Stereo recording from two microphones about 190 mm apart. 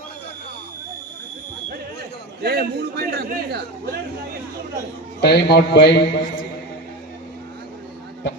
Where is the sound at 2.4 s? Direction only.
55° right (ahead or behind).